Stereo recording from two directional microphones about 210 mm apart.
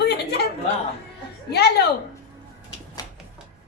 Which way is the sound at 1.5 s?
50° left (ahead or behind).